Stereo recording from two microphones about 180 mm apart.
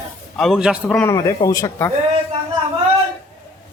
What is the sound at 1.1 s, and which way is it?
Speech, 20° left (ahead or behind).